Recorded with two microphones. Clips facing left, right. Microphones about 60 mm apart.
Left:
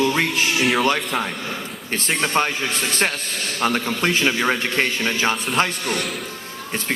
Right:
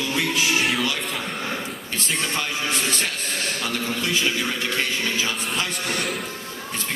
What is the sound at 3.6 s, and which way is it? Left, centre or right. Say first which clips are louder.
A man's voice: left 10 dB; left.